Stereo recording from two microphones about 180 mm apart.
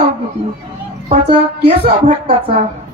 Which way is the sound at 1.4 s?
35° right (ahead or behind).